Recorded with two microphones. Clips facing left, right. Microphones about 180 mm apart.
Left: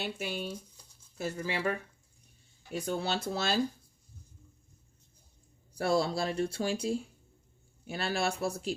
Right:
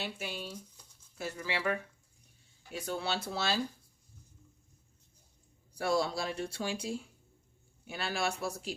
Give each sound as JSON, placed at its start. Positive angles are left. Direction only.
{"t": 0.0, "sound": "speech", "side_deg": 55}
{"t": 3.0, "sound": "speech", "side_deg": 45}
{"t": 5.7, "sound": "speech", "side_deg": 35}